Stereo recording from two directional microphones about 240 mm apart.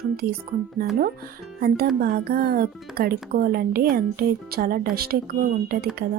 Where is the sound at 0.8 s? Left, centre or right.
Right.